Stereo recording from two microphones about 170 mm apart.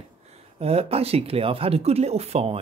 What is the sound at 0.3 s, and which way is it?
Speech, 35° right (ahead or behind).